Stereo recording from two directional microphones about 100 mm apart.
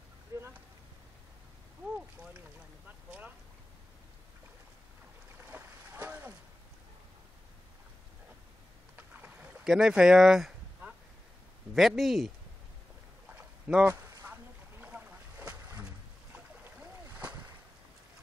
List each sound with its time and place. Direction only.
0.3 s a sound: 30° right (ahead or behind)
5.4 s boat: 20° right (ahead or behind)
8.9 s boat: 15° right (ahead or behind)
9.7 s speech: 5° right (ahead or behind)
11.7 s speech: centre (ahead or behind)
13.3 s a sound: 15° right (ahead or behind)
14.2 s boat: 15° right (ahead or behind)